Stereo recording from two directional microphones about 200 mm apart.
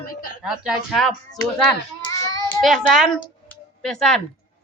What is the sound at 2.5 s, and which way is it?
A child's voice, centre (ahead or behind).